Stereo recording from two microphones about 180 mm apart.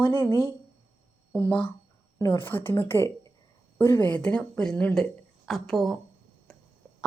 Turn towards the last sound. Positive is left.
turn(degrees=0)  # may be behind; listen again after turning